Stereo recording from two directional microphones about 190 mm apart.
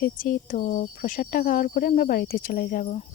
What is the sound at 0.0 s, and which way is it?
Speech, 45° left (ahead or behind).